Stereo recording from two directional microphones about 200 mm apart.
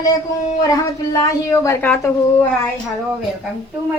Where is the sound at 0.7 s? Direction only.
15° left (ahead or behind).